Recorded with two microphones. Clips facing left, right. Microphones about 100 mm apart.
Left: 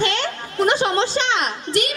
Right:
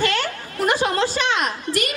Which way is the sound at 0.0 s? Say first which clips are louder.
Even; 25° left (ahead or behind).